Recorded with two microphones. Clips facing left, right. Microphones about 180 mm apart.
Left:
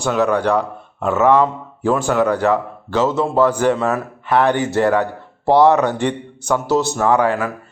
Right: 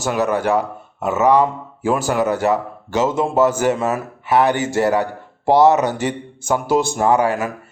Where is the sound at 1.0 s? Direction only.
5° right (ahead or behind).